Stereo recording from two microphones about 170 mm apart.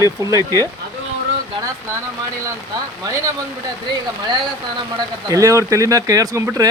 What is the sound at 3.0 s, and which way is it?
Speech, 20° right (ahead or behind).